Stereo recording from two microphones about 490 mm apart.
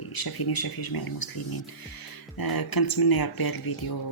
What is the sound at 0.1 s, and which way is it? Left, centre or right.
Speech, left.